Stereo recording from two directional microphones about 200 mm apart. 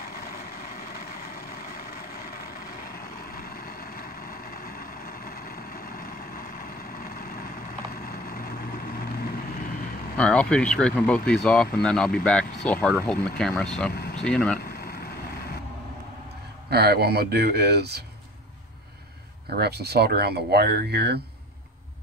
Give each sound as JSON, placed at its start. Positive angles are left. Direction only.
{"t": 0.0, "sound": "vehicle", "side_deg": 50}
{"t": 10.1, "sound": "speech", "side_deg": 5}
{"t": 14.6, "sound": "vehicle", "side_deg": 50}
{"t": 16.7, "sound": "speech", "side_deg": -50}
{"t": 19.6, "sound": "speech", "side_deg": -55}